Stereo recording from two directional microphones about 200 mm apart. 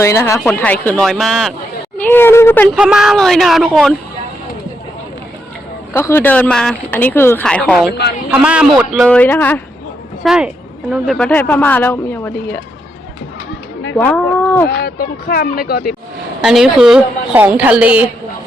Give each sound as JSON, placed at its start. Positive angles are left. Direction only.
{"t": 0.0, "sound": "speech", "side_deg": 15}
{"t": 2.0, "sound": "a sound", "side_deg": 10}
{"t": 2.7, "sound": "a man's voice", "side_deg": -5}
{"t": 5.9, "sound": "a man's voice", "side_deg": 10}
{"t": 10.2, "sound": "speech", "side_deg": -5}
{"t": 13.9, "sound": "speech", "side_deg": 10}
{"t": 14.7, "sound": "speech", "side_deg": 50}
{"t": 16.4, "sound": "a woman's voice", "side_deg": -5}